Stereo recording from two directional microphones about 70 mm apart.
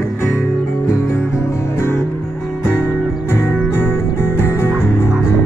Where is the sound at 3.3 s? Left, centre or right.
Left.